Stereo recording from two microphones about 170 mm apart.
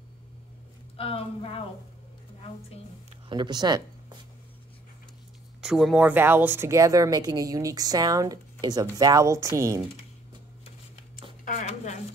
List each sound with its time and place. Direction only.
0.9 s speech: 35° left (ahead or behind)
3.3 s speech: 25° right (ahead or behind)
5.6 s speech: centre (ahead or behind); by 9.8 s 20° right (ahead or behind)
11.4 s shuffling cards: 45° left (ahead or behind)